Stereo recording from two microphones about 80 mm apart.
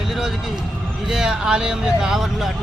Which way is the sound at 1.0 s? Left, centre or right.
Centre.